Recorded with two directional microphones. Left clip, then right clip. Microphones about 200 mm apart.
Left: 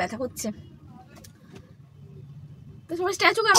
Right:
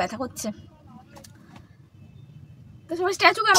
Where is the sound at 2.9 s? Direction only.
5° right (ahead or behind).